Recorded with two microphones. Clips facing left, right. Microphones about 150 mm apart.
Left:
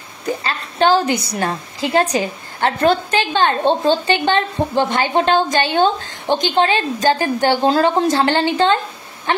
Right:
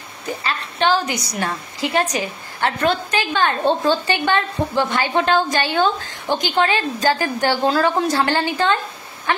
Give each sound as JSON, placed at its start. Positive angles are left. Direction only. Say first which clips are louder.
{"t": 0.4, "sound": "a woman's voice", "louder": "left 3 dB", "side_deg": 35}